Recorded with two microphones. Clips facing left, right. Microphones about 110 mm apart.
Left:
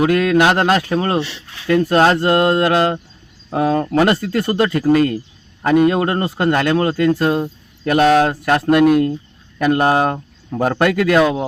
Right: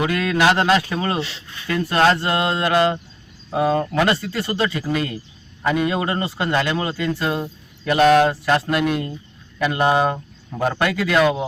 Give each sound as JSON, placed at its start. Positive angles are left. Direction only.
{"t": 0.0, "sound": "a man's voice", "side_deg": 50}
{"t": 1.5, "sound": "a sound", "side_deg": 75}
{"t": 2.0, "sound": "a man's voice", "side_deg": 50}